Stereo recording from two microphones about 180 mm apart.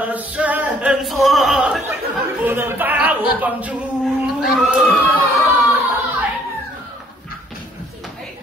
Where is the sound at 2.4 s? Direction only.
10° right (ahead or behind).